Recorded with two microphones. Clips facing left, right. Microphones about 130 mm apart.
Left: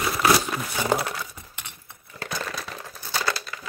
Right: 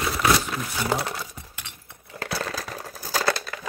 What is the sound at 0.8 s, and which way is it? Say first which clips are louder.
Speech: left 2 dB; centre (ahead or behind).